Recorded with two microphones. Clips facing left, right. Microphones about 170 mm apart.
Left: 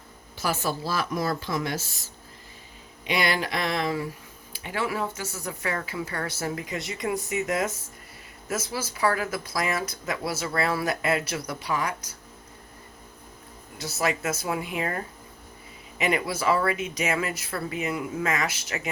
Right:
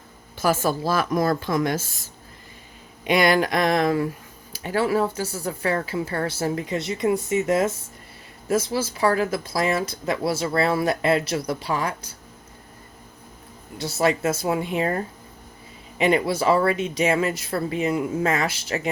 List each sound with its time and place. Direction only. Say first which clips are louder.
0.3 s speech: right 6 dB; 45° right (ahead or behind)
4.5 s speech: right 8 dB; 40° right (ahead or behind)
13.7 s speech: right 6 dB; 30° right (ahead or behind)